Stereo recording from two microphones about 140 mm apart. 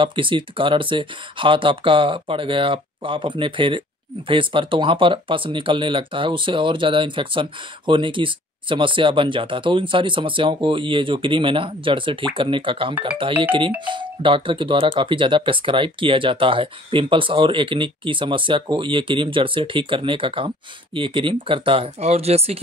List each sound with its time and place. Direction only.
0.0 s speech: 35° right (ahead or behind)